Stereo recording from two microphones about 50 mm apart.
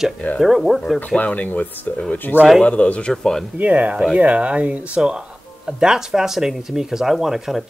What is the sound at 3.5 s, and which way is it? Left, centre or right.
Speech, right.